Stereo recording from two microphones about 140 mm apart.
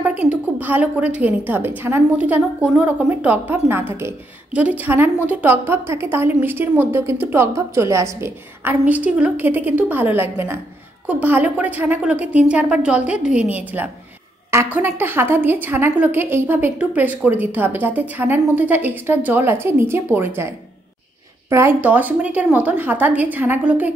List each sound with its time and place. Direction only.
0.0 s a woman's voice: 10° right (ahead or behind)
21.5 s a woman's voice: 20° right (ahead or behind)